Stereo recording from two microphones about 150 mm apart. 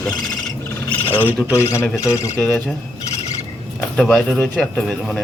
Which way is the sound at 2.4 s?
5° left (ahead or behind).